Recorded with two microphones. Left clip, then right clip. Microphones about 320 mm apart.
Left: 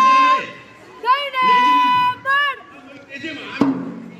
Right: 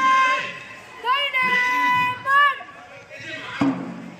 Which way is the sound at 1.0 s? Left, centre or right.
Centre.